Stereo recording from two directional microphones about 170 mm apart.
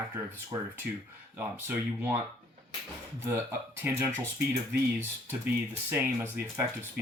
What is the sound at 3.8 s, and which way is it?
Speech, 10° right (ahead or behind).